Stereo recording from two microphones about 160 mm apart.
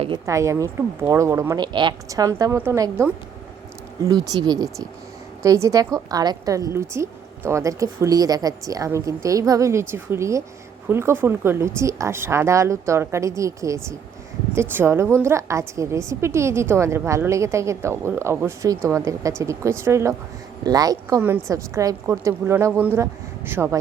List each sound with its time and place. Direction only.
0.3 s a woman's voice: 20° right (ahead or behind)